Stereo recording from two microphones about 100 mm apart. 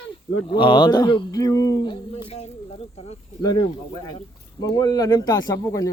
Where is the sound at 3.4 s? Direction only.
40° left (ahead or behind).